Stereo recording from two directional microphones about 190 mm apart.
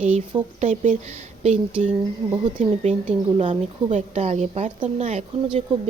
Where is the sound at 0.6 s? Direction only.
40° right (ahead or behind).